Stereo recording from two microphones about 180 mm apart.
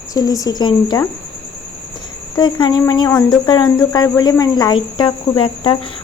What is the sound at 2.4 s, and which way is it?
Speech, 25° left (ahead or behind).